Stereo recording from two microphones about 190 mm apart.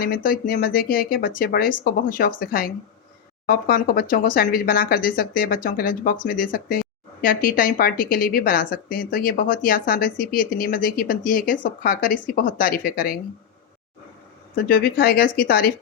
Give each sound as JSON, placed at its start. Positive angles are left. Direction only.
{"t": 0.0, "sound": "speech", "side_deg": 50}
{"t": 14.5, "sound": "speech", "side_deg": 50}